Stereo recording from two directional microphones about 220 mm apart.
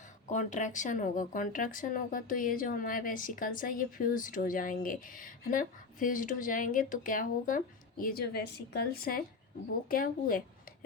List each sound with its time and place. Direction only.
0.3 s speech: 35° left (ahead or behind)